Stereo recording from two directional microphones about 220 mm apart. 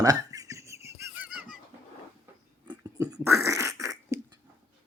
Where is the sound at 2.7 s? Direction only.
15° right (ahead or behind).